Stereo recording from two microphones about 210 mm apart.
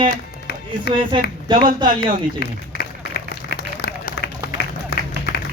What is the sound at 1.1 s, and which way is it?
Speech, 25° right (ahead or behind).